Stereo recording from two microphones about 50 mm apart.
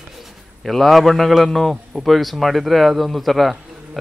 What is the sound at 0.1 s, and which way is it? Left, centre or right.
A man's voice, centre.